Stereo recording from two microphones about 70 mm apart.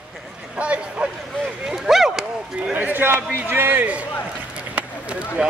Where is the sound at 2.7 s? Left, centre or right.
Right.